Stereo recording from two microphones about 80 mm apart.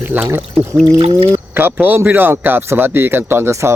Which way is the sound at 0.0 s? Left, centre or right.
Right.